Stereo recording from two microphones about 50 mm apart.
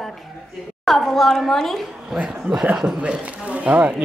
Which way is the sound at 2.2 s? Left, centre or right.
Centre.